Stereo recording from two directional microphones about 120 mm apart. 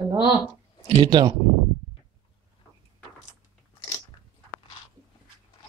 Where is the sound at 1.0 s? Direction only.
45° right (ahead or behind).